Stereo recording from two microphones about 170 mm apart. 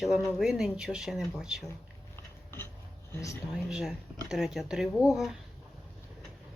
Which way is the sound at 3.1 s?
15° left (ahead or behind).